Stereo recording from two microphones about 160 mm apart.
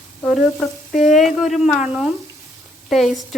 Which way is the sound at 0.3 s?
Centre (ahead or behind).